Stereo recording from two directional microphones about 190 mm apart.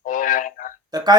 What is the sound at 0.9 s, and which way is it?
Speech, 20° right (ahead or behind).